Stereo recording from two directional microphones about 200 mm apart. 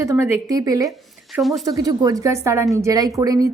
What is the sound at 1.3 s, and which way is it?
Speech, centre (ahead or behind).